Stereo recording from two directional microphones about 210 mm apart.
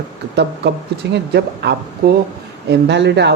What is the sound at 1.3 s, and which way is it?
Speech, 50° right (ahead or behind).